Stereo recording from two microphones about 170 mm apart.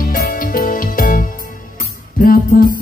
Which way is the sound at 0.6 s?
55° left (ahead or behind).